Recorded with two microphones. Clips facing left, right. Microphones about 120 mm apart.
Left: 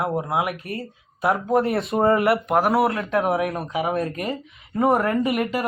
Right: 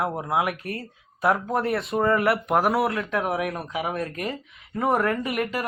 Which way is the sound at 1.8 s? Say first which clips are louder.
Left 4 dB; 25° left (ahead or behind).